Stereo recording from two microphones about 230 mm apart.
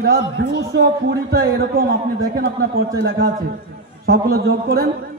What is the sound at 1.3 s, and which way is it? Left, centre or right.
Speech, right.